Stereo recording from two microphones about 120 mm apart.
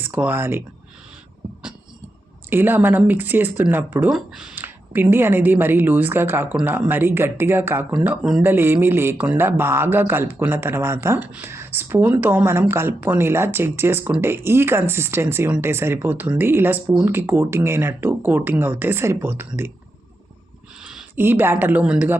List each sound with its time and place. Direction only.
0.0 s speech: 15° right (ahead or behind)
2.5 s a woman's voice: 20° right (ahead or behind)
21.2 s speech: 15° right (ahead or behind)